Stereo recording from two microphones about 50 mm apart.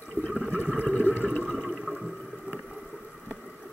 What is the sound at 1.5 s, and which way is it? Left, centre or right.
Toilet flush, centre.